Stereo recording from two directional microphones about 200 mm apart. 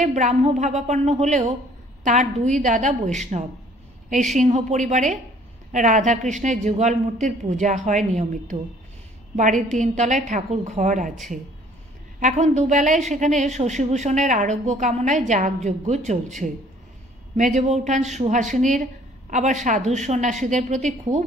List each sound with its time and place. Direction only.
0.0 s a woman's voice: 35° right (ahead or behind)